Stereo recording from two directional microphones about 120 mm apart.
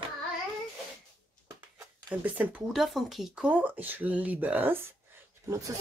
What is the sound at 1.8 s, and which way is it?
Speech, 10° right (ahead or behind).